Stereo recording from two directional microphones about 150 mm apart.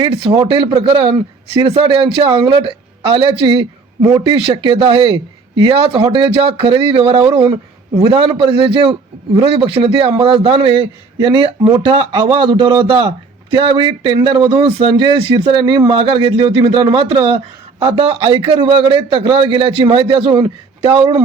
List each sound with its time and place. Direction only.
0.0 s a man's voice: 35° right (ahead or behind)